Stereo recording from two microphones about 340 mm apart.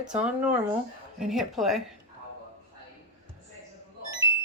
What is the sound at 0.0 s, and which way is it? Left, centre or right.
Speech, centre.